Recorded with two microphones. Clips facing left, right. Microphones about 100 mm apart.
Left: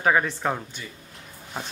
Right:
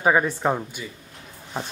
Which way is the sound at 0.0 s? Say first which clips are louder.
Right 2 dB; 15° right (ahead or behind).